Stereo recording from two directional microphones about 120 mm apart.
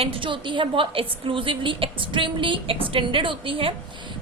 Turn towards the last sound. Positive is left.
turn(degrees=-45)  # may be behind; listen again after turning